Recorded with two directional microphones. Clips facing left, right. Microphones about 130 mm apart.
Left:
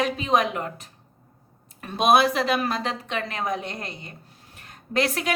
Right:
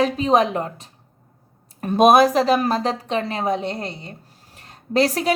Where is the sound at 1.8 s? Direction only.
45° right (ahead or behind).